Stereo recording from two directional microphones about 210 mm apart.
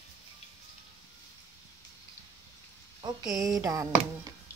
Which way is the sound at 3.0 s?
15° right (ahead or behind).